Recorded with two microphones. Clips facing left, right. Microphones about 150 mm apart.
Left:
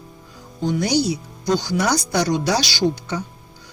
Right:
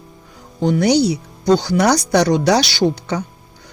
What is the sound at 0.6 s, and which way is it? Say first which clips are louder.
Speech: right 5 dB; 65° right (ahead or behind).